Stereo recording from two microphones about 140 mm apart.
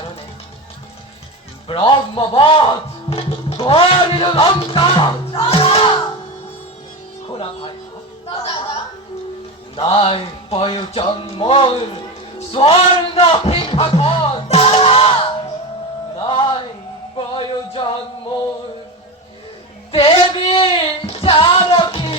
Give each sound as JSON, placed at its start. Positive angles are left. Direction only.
{"t": 1.6, "sound": "a man's voice", "side_deg": 40}
{"t": 8.3, "sound": "a sound", "side_deg": 35}
{"t": 9.7, "sound": "speech", "side_deg": 40}
{"t": 12.5, "sound": "music", "side_deg": 45}
{"t": 16.1, "sound": "music", "side_deg": 35}
{"t": 20.1, "sound": "a sound", "side_deg": 40}